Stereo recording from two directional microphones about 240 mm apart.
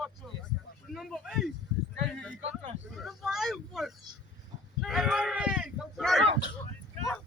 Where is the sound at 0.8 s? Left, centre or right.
Centre.